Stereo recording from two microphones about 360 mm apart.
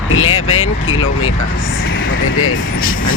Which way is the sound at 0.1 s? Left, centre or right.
Left.